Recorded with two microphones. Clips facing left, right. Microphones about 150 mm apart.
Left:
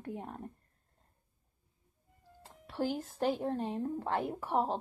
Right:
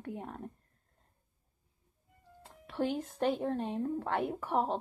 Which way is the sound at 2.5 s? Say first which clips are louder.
Right 1 dB; centre (ahead or behind).